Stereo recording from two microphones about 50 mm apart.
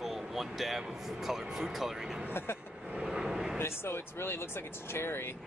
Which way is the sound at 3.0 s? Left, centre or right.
Centre.